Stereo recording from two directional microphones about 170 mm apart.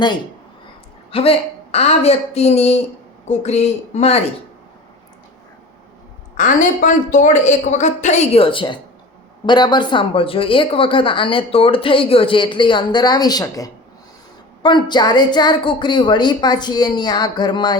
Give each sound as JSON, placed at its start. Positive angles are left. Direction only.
{"t": 1.1, "sound": "speech", "side_deg": 35}
{"t": 6.3, "sound": "a woman's voice", "side_deg": 50}